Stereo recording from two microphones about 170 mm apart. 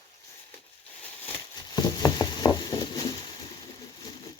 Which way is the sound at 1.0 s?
10° left (ahead or behind).